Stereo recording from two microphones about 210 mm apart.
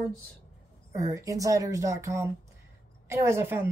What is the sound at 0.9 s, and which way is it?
A woman's voice, 15° right (ahead or behind).